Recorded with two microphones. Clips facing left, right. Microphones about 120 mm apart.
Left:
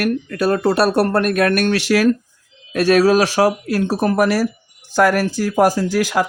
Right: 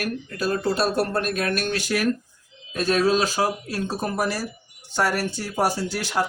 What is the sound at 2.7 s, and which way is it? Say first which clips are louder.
Speech: left 7 dB; 75° left (ahead or behind).